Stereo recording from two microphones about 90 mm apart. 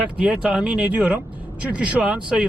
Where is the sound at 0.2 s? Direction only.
10° right (ahead or behind).